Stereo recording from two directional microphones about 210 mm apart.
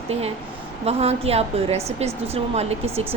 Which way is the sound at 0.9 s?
30° right (ahead or behind).